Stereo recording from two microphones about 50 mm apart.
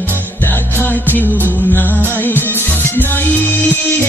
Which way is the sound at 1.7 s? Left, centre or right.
Left.